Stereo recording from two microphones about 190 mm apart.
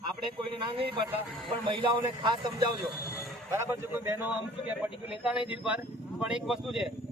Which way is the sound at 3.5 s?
15° right (ahead or behind).